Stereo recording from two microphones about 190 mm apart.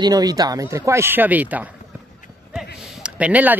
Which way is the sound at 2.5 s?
5° right (ahead or behind).